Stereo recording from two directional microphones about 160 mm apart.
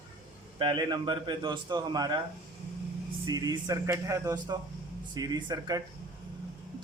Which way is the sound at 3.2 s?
25° right (ahead or behind).